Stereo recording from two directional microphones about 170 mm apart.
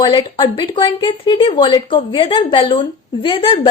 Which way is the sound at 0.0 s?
30° left (ahead or behind).